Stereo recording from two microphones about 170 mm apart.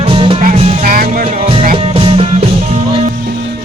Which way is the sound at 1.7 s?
35° right (ahead or behind).